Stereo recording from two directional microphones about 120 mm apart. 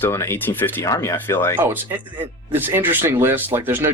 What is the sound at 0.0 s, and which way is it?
Speech, 20° left (ahead or behind).